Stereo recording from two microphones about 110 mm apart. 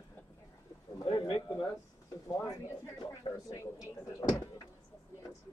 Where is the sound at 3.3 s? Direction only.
30° left (ahead or behind).